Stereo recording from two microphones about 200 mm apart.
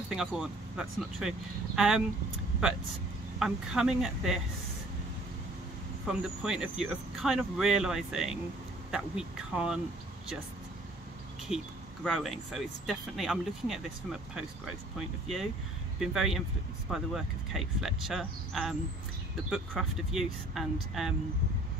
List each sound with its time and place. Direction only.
0.1 s speech: 5° right (ahead or behind)
3.3 s speech: centre (ahead or behind)
6.0 s speech: 5° right (ahead or behind)
11.4 s speech: centre (ahead or behind)